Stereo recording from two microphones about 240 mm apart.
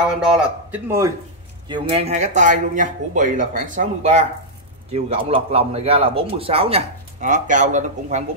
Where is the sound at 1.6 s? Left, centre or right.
Right.